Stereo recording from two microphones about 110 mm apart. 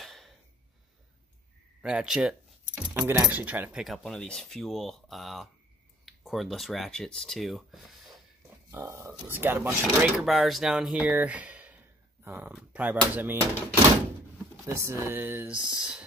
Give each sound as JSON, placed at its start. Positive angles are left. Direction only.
{"t": 0.0, "sound": "a sound", "side_deg": 0}
{"t": 1.8, "sound": "keys jangling", "side_deg": -5}
{"t": 3.1, "sound": "speech", "side_deg": -15}
{"t": 3.8, "sound": "speech", "side_deg": 0}
{"t": 8.6, "sound": "speech", "side_deg": -25}
{"t": 10.1, "sound": "speech", "side_deg": 0}
{"t": 14.7, "sound": "speech", "side_deg": -25}